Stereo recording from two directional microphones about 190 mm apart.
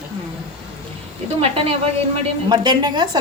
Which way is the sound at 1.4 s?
30° right (ahead or behind).